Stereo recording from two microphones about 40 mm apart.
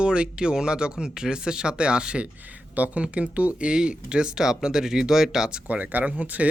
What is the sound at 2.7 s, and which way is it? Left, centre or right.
Speech, right.